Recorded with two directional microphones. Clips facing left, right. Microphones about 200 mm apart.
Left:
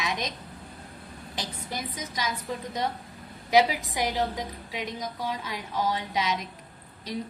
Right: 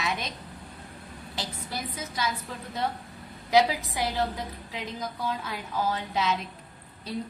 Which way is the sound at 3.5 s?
15° left (ahead or behind).